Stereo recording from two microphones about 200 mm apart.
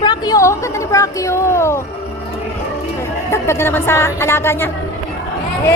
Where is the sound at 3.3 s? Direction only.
15° left (ahead or behind).